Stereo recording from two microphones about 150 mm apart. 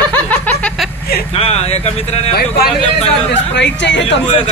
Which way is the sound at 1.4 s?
45° left (ahead or behind).